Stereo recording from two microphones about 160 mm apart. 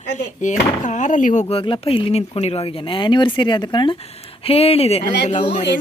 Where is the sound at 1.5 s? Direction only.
35° left (ahead or behind).